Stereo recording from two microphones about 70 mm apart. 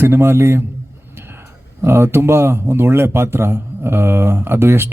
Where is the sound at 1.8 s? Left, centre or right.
Right.